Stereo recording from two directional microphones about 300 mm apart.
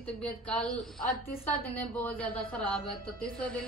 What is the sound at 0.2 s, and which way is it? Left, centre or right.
A woman's voice, centre.